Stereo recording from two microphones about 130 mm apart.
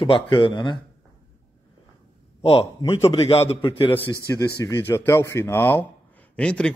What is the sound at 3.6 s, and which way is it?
Speech, 40° left (ahead or behind).